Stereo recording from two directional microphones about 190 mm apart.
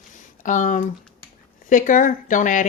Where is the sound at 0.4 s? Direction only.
40° left (ahead or behind).